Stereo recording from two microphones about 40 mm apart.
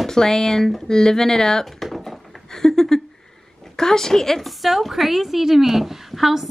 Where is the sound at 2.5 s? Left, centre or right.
Centre.